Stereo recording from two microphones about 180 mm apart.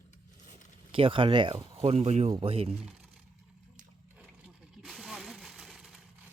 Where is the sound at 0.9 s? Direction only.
30° right (ahead or behind).